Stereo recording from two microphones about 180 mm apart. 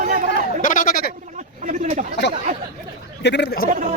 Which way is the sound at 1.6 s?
40° right (ahead or behind).